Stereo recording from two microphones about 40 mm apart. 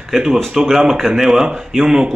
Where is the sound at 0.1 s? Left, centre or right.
Centre.